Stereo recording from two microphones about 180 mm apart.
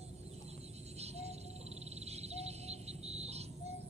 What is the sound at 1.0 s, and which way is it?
Music, 35° right (ahead or behind).